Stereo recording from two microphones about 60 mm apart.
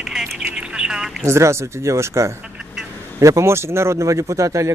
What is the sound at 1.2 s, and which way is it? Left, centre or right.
A man's voice, right.